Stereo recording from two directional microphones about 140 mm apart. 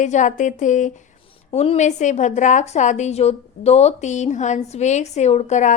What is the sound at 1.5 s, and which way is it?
A woman's voice, 45° left (ahead or behind).